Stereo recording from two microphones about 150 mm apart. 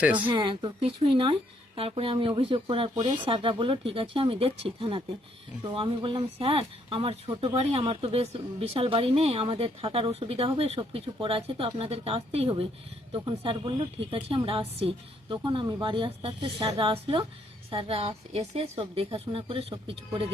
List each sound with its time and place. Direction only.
0.0 s speech: 10° right (ahead or behind)
0.3 s speech: 30° right (ahead or behind)